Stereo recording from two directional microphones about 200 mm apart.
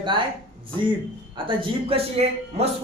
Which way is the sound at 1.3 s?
25° right (ahead or behind).